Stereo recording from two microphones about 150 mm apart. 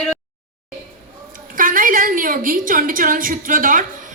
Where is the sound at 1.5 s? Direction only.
65° right (ahead or behind).